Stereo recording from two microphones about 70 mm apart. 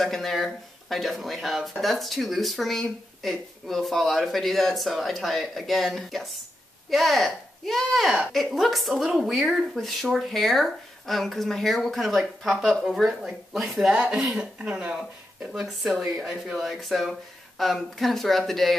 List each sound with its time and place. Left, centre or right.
0.0 s speech: centre
15.5 s speech: centre